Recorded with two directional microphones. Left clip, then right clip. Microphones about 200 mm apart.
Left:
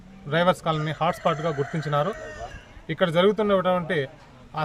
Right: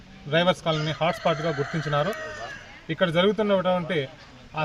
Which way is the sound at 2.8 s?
25° left (ahead or behind).